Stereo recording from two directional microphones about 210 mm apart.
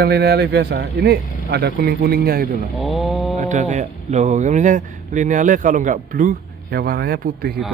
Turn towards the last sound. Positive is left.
turn(degrees=-45)  # may be behind; listen again after turning